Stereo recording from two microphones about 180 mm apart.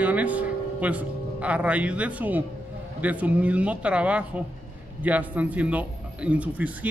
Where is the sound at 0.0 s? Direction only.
10° right (ahead or behind).